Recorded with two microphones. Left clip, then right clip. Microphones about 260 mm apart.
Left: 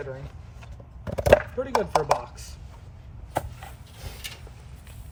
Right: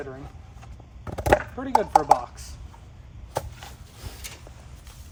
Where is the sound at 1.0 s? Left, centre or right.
Centre.